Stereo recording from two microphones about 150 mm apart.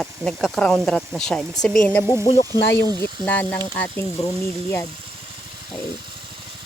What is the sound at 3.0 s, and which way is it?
Speech, 10° left (ahead or behind).